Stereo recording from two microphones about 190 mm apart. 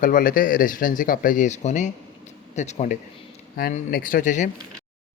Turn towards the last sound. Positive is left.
turn(degrees=40)  # may be behind; listen again after turning